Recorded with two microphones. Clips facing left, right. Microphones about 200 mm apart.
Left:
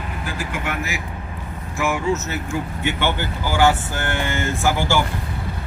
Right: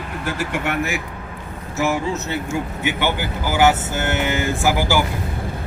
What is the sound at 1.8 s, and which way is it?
Speech, 40° right (ahead or behind).